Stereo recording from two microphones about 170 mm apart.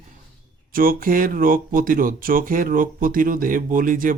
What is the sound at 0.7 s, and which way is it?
Speech, 60° right (ahead or behind).